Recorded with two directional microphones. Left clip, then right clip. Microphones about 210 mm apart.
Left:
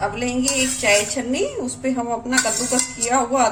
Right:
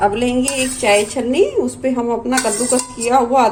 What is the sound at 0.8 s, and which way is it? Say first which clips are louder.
Speech: right 5 dB; 35° right (ahead or behind).